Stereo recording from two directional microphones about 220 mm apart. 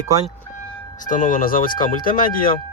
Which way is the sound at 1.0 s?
40° left (ahead or behind).